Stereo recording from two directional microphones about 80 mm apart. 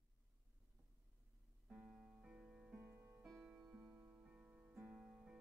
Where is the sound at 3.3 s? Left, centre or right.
Centre.